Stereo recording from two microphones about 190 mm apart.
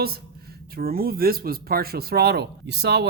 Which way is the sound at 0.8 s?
50° right (ahead or behind).